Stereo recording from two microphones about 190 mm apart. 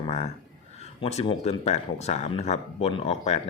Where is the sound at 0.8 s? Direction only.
35° left (ahead or behind).